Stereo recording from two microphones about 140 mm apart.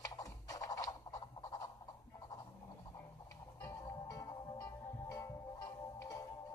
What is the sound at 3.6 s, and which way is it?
Music, 25° left (ahead or behind).